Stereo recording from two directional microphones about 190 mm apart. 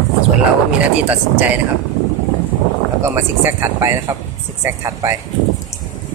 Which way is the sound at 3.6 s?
15° right (ahead or behind).